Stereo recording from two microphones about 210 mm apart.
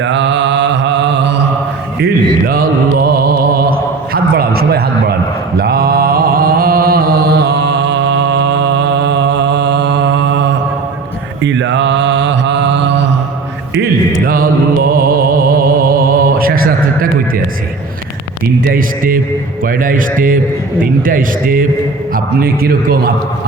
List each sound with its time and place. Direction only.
0.0 s mantra: 60° right (ahead or behind)
2.5 s mantra: 45° right (ahead or behind)
4.1 s a sound: 45° right (ahead or behind)
5.5 s mantra: 45° right (ahead or behind)
14.3 s music: 45° right (ahead or behind)
18.6 s a man's voice: 45° right (ahead or behind)